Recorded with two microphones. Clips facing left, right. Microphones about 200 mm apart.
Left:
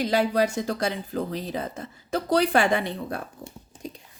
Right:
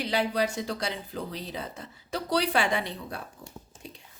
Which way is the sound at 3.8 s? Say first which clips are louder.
Left 9 dB; 40° left (ahead or behind).